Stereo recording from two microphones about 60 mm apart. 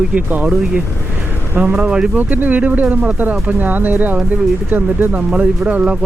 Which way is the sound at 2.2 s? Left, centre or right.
Right.